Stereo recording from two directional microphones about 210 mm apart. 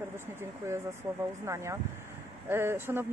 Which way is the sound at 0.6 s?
15° right (ahead or behind).